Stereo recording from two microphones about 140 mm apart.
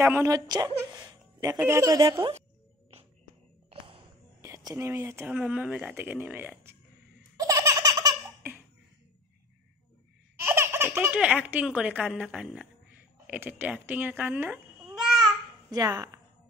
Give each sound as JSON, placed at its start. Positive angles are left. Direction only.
{"t": 0.0, "sound": "a woman's voice", "side_deg": -20}
{"t": 4.4, "sound": "speech", "side_deg": -20}
{"t": 7.3, "sound": "laughter", "side_deg": -25}
{"t": 10.4, "sound": "laughter", "side_deg": -20}
{"t": 11.0, "sound": "speech", "side_deg": -10}
{"t": 15.7, "sound": "a woman's voice", "side_deg": -25}